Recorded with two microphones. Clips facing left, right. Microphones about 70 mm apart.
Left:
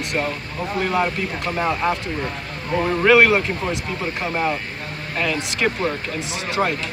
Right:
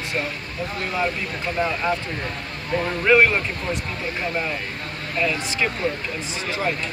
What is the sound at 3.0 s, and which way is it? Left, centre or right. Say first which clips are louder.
Speech: left 3 dB; left.